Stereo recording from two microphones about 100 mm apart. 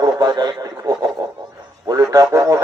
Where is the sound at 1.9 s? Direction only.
35° right (ahead or behind).